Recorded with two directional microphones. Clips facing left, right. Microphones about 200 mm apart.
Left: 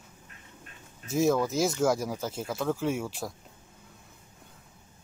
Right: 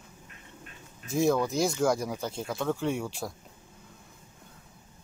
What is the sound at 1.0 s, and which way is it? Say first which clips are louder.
Speech: even; centre (ahead or behind).